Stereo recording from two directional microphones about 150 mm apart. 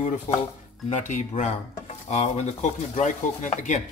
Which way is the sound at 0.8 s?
55° left (ahead or behind).